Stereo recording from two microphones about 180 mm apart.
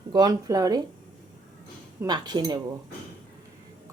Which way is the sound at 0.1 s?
20° right (ahead or behind).